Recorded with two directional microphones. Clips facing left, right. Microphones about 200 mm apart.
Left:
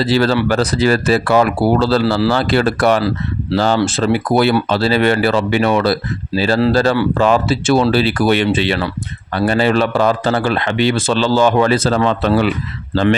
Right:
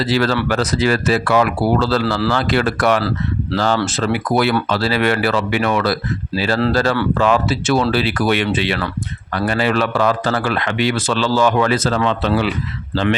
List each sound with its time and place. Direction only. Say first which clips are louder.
0.0 s speech: left 3 dB; 30° left (ahead or behind)
12.2 s speech: left 3 dB; 50° left (ahead or behind)